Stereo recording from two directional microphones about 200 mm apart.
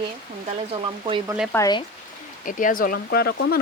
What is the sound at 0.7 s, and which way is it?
Speech, 25° right (ahead or behind).